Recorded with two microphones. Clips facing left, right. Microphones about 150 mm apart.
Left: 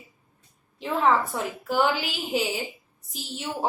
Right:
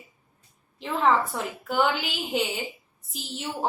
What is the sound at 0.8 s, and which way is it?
A woman's voice, centre (ahead or behind).